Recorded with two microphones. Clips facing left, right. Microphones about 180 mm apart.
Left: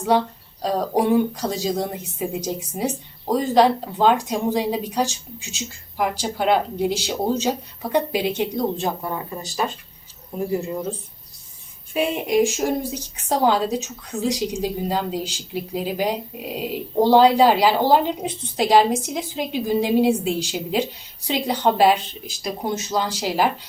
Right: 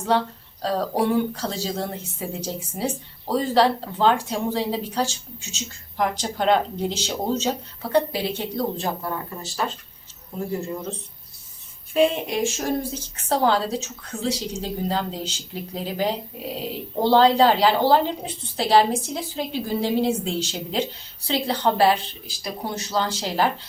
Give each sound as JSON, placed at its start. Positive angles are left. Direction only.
{"t": 0.1, "sound": "a woman's voice", "side_deg": 10}
{"t": 11.9, "sound": "a woman's voice", "side_deg": 10}